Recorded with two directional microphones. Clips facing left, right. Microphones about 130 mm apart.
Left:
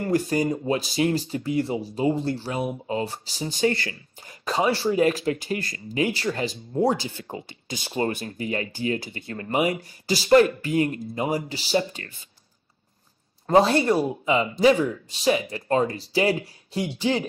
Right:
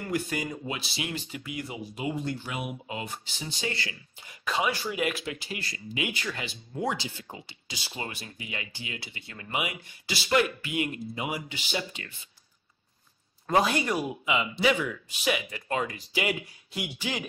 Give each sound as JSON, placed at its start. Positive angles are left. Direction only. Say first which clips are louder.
{"t": 0.0, "sound": "speech", "louder": "left 8 dB", "side_deg": 35}
{"t": 13.5, "sound": "speech", "louder": "left 7 dB", "side_deg": 30}